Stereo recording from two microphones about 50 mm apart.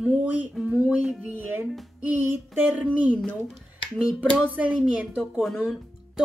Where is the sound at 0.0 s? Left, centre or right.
Right.